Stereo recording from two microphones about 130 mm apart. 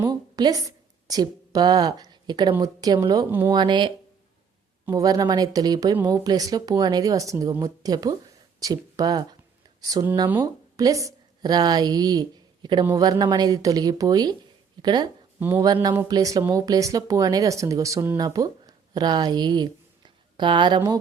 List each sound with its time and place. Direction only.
0.1 s a woman's voice: 30° right (ahead or behind)
15.4 s speech: 15° right (ahead or behind)
15.6 s speech: 30° right (ahead or behind)